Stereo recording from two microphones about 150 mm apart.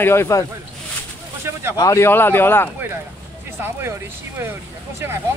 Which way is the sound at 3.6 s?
15° right (ahead or behind).